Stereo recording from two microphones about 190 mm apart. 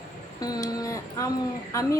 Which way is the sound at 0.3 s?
20° left (ahead or behind).